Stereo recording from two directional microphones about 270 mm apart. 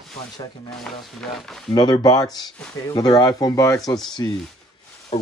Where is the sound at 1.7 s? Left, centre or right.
Centre.